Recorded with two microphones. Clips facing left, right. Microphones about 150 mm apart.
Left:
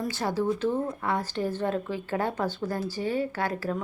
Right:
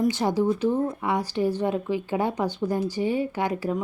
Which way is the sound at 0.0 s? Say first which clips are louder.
Right 5 dB; 20° right (ahead or behind).